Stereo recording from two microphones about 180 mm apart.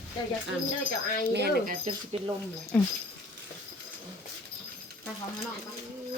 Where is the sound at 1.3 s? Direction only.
65° right (ahead or behind).